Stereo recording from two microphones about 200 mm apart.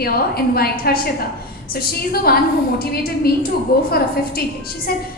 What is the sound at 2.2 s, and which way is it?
A woman's voice, 50° left (ahead or behind).